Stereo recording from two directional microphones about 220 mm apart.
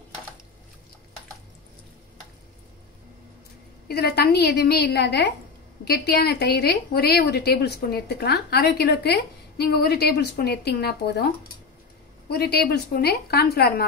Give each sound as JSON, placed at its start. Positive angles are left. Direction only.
{"t": 3.8, "sound": "a woman's voice", "side_deg": 45}
{"t": 12.3, "sound": "a woman's voice", "side_deg": 45}